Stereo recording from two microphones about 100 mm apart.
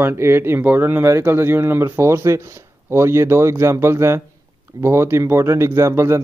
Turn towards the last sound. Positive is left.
turn(degrees=-30)  # may be behind; listen again after turning